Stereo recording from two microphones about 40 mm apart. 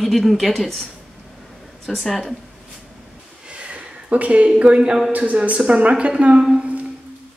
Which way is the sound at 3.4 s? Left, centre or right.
Right.